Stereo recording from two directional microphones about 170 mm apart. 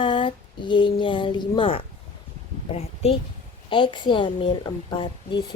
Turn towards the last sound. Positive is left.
turn(degrees=30)  # may be behind; listen again after turning